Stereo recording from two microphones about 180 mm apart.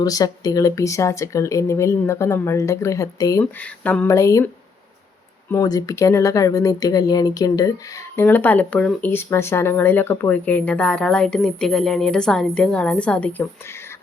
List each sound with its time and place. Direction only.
0.0 s speech: 20° left (ahead or behind)
3.4 s speech: 5° left (ahead or behind)
5.5 s speech: 20° left (ahead or behind)